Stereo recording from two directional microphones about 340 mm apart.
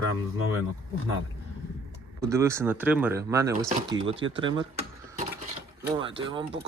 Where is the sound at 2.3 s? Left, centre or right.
Centre.